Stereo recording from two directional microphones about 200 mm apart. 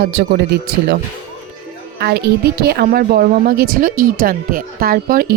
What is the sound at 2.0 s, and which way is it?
A woman's voice, 55° right (ahead or behind).